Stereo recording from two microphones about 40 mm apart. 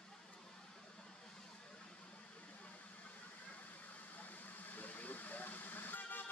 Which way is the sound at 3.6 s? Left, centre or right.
Left.